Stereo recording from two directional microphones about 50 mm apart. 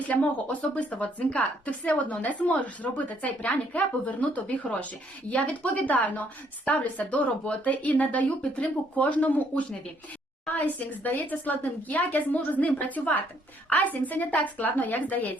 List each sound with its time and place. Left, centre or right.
0.1 s a woman's voice: left